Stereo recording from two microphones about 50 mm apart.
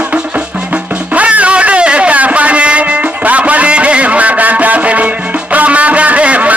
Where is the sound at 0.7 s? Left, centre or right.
Right.